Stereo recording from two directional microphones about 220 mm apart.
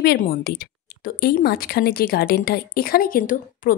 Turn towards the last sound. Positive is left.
turn(degrees=40)  # may be behind; listen again after turning